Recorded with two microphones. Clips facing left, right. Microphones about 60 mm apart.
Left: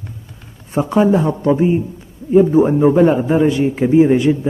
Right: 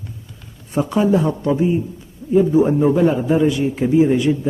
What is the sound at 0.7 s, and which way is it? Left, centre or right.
A man's voice, left.